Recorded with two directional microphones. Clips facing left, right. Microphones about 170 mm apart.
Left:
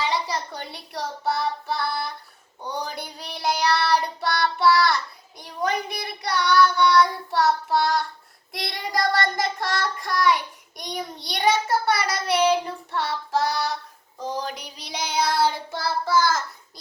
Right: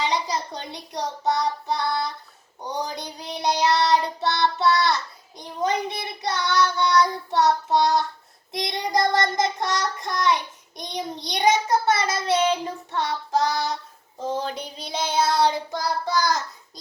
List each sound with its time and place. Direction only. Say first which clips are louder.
0.0 s child singing: right 1 dB; 20° right (ahead or behind)